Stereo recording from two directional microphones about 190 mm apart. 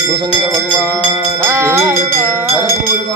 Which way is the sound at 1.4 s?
10° right (ahead or behind).